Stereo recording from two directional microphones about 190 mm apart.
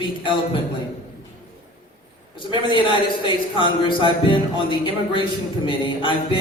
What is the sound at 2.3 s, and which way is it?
A man's voice, 25° left (ahead or behind).